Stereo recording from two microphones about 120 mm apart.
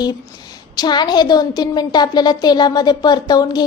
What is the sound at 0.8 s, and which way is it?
A woman's voice, 35° left (ahead or behind).